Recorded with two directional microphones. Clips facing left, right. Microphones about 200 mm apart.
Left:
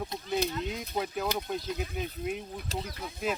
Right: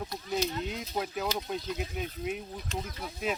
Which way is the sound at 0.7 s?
Centre (ahead or behind).